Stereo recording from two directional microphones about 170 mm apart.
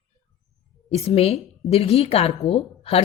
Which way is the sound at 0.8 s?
35° left (ahead or behind).